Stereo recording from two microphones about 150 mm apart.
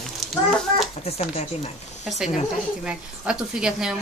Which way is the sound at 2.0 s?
Centre (ahead or behind).